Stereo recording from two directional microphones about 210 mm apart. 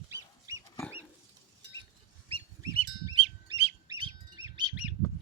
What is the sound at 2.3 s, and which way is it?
Bird, 20° right (ahead or behind).